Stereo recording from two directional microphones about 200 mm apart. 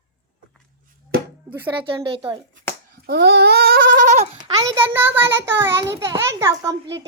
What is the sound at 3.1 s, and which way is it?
Bleat, 55° right (ahead or behind).